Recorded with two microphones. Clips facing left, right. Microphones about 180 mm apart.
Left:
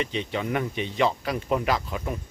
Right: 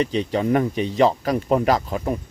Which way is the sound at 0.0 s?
40° right (ahead or behind).